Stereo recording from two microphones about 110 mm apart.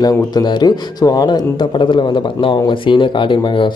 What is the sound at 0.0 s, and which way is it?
A man's voice, 40° left (ahead or behind).